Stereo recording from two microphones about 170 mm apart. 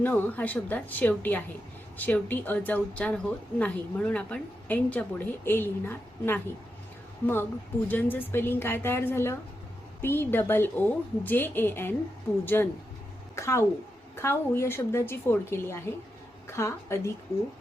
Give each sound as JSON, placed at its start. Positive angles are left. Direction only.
{"t": 0.0, "sound": "a woman's voice", "side_deg": 10}